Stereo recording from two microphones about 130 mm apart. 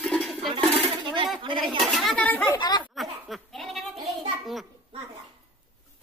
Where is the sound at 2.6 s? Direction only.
35° left (ahead or behind).